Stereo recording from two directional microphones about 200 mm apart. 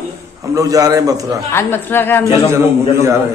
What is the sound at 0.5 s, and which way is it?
Speech, 15° right (ahead or behind).